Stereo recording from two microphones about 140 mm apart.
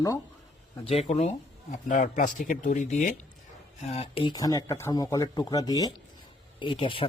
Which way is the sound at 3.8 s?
50° left (ahead or behind).